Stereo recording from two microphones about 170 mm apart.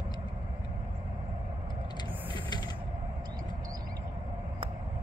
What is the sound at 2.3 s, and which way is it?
Vehicle, 25° left (ahead or behind).